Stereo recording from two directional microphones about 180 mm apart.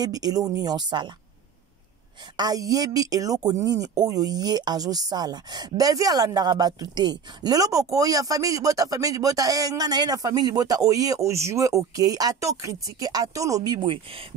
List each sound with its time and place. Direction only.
0.0 s speech: 20° right (ahead or behind)
2.3 s speech: 20° right (ahead or behind)